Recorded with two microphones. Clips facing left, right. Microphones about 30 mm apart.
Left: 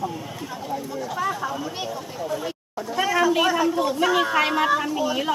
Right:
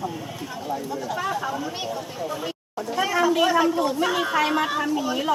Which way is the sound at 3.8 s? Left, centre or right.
Centre.